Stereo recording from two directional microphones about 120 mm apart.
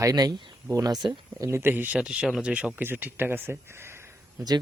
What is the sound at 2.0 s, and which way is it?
Speech, 5° right (ahead or behind).